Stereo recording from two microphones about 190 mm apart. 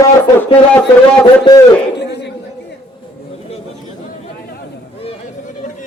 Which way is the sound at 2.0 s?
65° left (ahead or behind).